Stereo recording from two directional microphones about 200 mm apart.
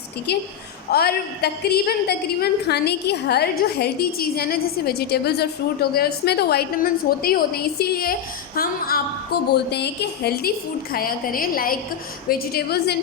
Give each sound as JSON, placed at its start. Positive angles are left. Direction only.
{"t": 0.3, "sound": "a woman's voice", "side_deg": 55}